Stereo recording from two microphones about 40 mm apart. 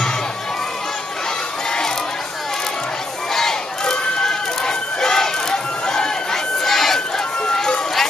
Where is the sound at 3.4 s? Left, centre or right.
Centre.